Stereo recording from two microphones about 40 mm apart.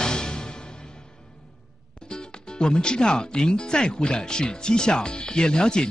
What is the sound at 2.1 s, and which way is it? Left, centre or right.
Speech, left.